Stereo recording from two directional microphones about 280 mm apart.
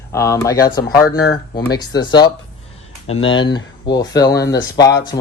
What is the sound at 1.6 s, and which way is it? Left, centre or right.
Speech, centre.